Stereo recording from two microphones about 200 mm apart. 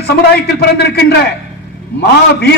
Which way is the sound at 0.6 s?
55° left (ahead or behind).